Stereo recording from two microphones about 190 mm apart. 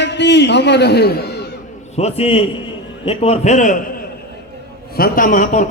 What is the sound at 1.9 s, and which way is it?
A man's voice, 35° left (ahead or behind).